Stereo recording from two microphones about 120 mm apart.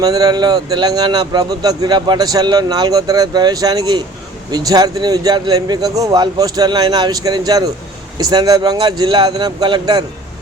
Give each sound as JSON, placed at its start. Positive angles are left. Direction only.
{"t": 0.0, "sound": "a man's voice", "side_deg": -35}